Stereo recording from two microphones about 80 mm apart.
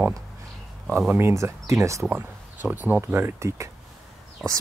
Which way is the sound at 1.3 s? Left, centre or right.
Right.